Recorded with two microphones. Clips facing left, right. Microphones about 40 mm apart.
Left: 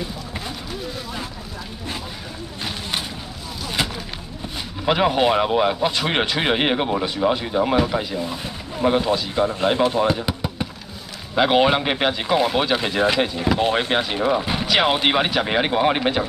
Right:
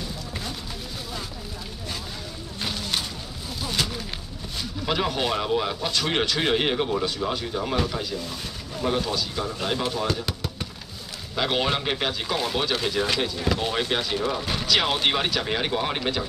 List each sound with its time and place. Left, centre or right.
2.7 s a sound: left
4.8 s speech: left
9.9 s drum: left
11.3 s speech: left